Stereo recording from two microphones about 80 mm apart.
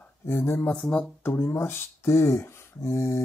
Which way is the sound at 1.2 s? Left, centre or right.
Left.